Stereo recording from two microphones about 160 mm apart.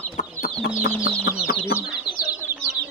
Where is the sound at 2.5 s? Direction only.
15° right (ahead or behind).